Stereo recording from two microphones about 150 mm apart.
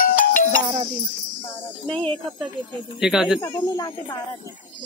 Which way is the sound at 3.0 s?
5° right (ahead or behind).